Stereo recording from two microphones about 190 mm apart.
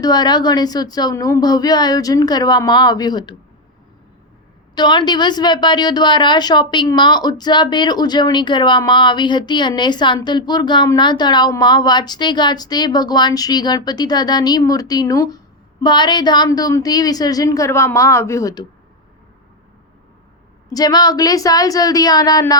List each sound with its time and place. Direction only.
0.0 s a woman's voice: 20° left (ahead or behind)
4.7 s a woman's voice: 25° left (ahead or behind)
20.7 s a woman's voice: 20° left (ahead or behind)